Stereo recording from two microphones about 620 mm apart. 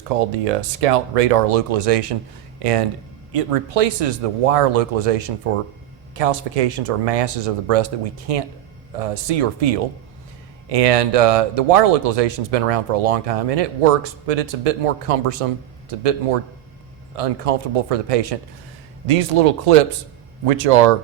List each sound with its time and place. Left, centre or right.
0.1 s speech: right
19.0 s speech: right